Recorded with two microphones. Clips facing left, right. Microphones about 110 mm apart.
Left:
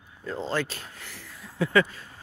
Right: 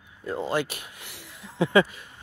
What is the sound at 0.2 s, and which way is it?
Speech, 15° right (ahead or behind).